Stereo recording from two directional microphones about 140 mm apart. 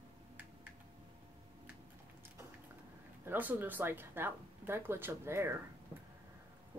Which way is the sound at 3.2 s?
15° right (ahead or behind).